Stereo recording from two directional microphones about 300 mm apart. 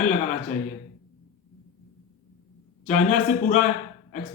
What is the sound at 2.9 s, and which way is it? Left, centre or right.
Speech, left.